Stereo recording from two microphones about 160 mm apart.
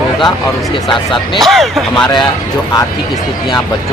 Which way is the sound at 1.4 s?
Centre (ahead or behind).